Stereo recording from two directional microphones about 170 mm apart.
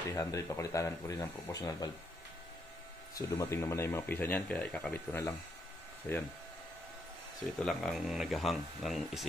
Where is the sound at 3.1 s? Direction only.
20° left (ahead or behind).